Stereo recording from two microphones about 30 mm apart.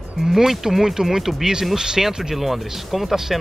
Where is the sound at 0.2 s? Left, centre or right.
Centre.